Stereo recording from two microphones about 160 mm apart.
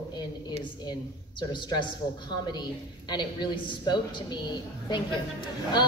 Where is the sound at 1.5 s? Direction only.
30° left (ahead or behind).